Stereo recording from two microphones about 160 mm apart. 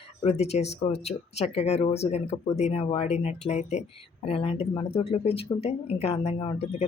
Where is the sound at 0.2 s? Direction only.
40° left (ahead or behind).